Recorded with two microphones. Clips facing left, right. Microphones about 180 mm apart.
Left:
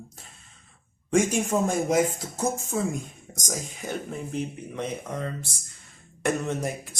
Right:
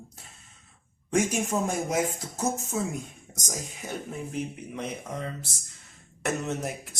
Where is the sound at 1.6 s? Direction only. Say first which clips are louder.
Left 4 dB; 5° right (ahead or behind).